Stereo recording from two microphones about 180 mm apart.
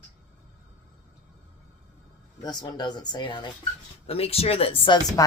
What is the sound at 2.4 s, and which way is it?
Speech, 25° left (ahead or behind).